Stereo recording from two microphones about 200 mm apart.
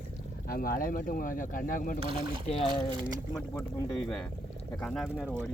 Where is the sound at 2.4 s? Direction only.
30° left (ahead or behind).